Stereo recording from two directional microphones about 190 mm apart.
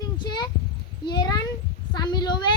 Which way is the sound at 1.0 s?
20° left (ahead or behind).